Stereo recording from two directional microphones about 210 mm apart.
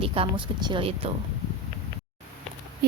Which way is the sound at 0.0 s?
25° right (ahead or behind).